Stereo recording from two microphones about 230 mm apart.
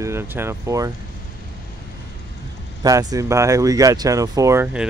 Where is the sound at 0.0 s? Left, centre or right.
Centre.